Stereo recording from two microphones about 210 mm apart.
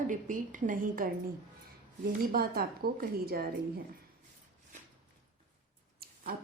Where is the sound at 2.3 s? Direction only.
45° right (ahead or behind).